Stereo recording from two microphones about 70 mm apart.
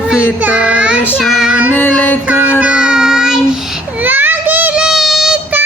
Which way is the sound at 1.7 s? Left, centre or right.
Left.